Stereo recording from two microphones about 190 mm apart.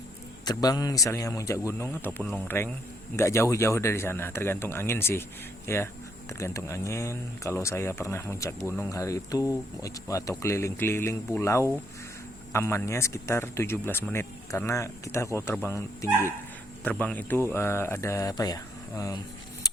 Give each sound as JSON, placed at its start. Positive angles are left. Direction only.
{"t": 0.4, "sound": "speech", "side_deg": 20}